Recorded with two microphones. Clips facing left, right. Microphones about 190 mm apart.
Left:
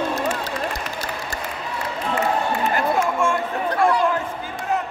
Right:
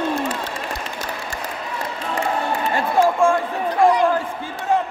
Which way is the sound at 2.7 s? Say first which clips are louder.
Right 6 dB; 30° right (ahead or behind).